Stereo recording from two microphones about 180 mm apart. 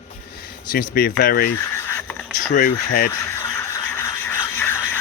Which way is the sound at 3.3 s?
15° left (ahead or behind).